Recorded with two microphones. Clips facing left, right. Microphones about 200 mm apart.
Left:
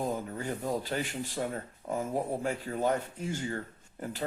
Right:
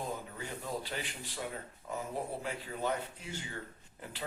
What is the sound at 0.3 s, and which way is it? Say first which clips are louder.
Speech: left 7 dB; 45° left (ahead or behind).